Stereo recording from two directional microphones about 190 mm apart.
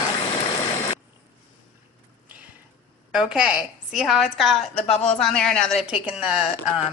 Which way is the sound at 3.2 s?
5° right (ahead or behind).